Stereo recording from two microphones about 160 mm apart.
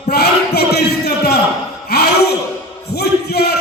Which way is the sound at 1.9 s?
85° left.